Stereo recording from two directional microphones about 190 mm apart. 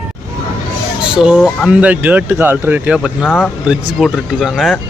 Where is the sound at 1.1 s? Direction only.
5° right (ahead or behind).